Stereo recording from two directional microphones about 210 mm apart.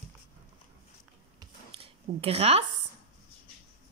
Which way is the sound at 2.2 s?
30° right (ahead or behind).